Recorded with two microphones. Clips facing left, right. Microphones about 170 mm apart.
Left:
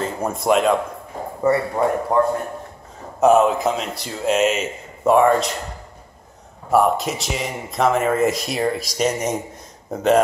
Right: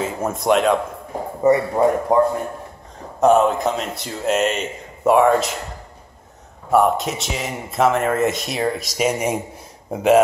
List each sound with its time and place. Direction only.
0.0 s speech: centre (ahead or behind)
1.4 s a man's voice: 20° right (ahead or behind)
3.2 s speech: 5° left (ahead or behind)
6.7 s speech: centre (ahead or behind)